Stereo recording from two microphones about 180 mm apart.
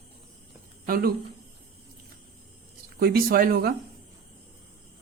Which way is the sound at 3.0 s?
55° right (ahead or behind).